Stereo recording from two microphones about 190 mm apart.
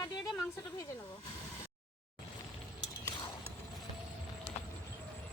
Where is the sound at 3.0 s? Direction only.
20° left (ahead or behind).